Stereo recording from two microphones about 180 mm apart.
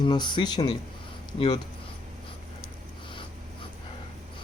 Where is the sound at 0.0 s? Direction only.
25° left (ahead or behind).